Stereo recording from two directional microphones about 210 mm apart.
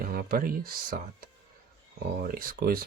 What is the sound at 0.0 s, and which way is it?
Speech, 45° right (ahead or behind).